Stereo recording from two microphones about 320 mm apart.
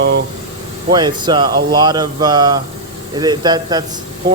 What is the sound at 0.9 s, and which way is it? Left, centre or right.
Speech, centre.